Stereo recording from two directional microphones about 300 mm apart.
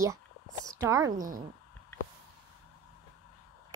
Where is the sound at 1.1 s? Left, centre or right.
Right.